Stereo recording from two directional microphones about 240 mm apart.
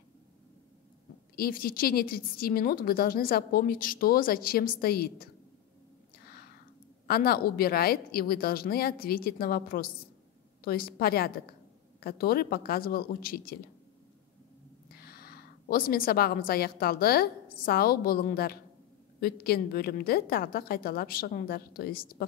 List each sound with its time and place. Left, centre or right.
1.3 s a woman's voice: left
7.1 s a woman's voice: left
15.0 s a woman's voice: left